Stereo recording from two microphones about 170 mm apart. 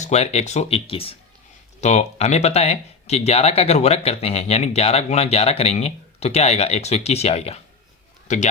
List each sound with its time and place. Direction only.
0.0 s speech: 40° left (ahead or behind)